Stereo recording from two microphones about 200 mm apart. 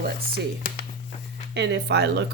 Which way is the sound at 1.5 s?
55° right (ahead or behind).